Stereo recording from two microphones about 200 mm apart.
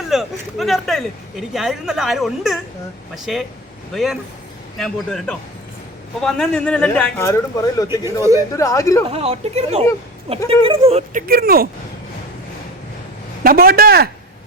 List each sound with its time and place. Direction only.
0.1 s speech: centre (ahead or behind)
3.9 s speech: centre (ahead or behind); by 7.9 s 15° left (ahead or behind)
8.0 s speech: 15° right (ahead or behind)
8.5 s speech: 15° left (ahead or behind)
9.0 s speech: 30° right (ahead or behind)
11.1 s speech: 50° right (ahead or behind)
13.4 s speech: 50° right (ahead or behind)